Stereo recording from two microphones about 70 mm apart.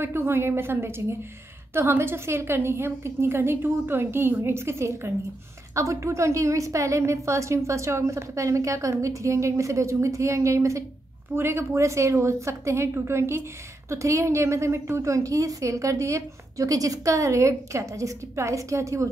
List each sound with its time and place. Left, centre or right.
0.0 s a woman's voice: right